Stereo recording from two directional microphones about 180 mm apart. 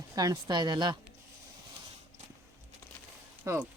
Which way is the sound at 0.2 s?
20° right (ahead or behind).